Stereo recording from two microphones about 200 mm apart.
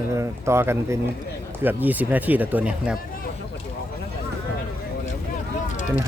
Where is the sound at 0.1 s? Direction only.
15° right (ahead or behind).